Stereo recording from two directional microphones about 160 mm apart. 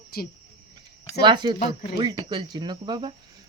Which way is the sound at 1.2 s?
30° right (ahead or behind).